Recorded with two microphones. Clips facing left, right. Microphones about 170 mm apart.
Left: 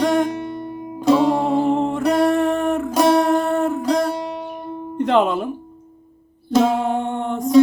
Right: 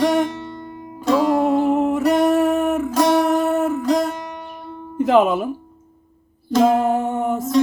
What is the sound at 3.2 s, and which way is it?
Humming, 5° right (ahead or behind).